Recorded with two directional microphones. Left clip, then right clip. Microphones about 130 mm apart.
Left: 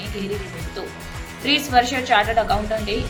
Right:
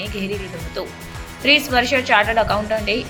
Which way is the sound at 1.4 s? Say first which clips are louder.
Right 2 dB; 30° right (ahead or behind).